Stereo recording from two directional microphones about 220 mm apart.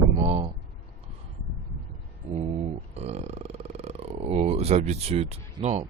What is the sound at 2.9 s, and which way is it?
Speech, 30° right (ahead or behind).